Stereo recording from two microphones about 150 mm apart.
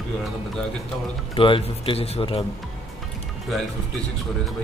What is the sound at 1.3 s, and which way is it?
A man's voice, 35° left (ahead or behind).